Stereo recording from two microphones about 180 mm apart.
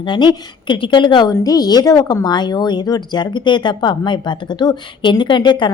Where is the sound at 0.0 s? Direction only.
25° left (ahead or behind).